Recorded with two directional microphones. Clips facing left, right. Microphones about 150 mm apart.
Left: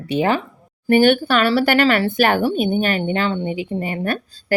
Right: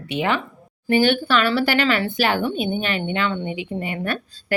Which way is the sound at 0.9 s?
50° left (ahead or behind).